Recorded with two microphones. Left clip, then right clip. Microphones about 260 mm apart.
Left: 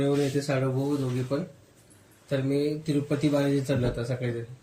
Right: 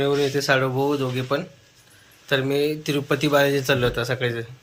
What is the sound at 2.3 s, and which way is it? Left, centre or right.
Speech, right.